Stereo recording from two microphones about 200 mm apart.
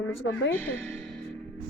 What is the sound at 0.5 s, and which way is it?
Speech, 10° left (ahead or behind).